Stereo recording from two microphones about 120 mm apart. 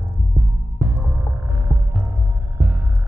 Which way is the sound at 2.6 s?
10° right (ahead or behind).